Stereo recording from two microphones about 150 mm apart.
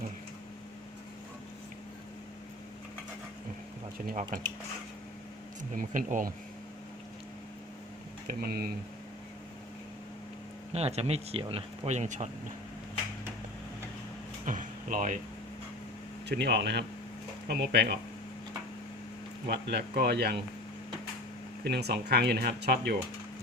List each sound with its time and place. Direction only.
4.0 s speech: 60° right (ahead or behind)
5.7 s speech: 60° right (ahead or behind)
8.4 s speech: 85° right
10.7 s speech: 45° right (ahead or behind)
14.4 s music: 60° right (ahead or behind)
16.3 s speech: 90° right
19.5 s speech: 90° right
21.6 s speech: 90° right